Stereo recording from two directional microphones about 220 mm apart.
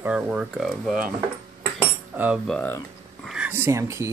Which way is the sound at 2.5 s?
5° left (ahead or behind).